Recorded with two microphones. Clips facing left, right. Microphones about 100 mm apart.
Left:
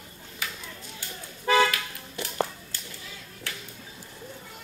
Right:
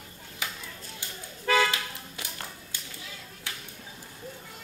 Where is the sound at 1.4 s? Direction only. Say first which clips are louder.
Left 3 dB; 15° left (ahead or behind).